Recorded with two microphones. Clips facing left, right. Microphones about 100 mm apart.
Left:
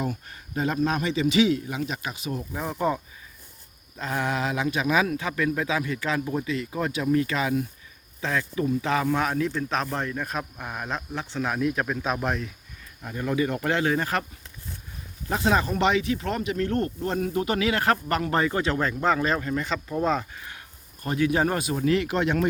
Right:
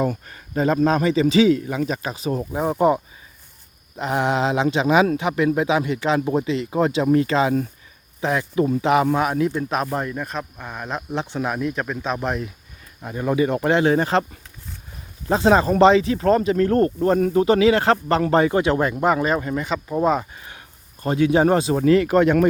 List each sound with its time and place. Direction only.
0.9 s speech: 40° right (ahead or behind); by 9.0 s 20° right (ahead or behind)
9.1 s speech: 10° right (ahead or behind)
11.1 s speech: 20° right (ahead or behind)
11.4 s speech: 5° right (ahead or behind)
13.0 s speech: 25° right (ahead or behind)
15.3 s speech: 30° right (ahead or behind); by 17.2 s 45° right (ahead or behind)
17.3 s speech: 30° right (ahead or behind); by 20.2 s 10° right (ahead or behind)
21.0 s speech: 25° right (ahead or behind)
21.8 s speech: 45° right (ahead or behind)